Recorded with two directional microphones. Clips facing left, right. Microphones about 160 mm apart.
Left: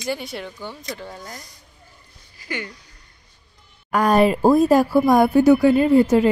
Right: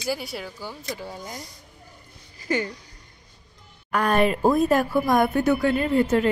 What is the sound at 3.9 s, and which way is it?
A woman's voice, 40° left (ahead or behind).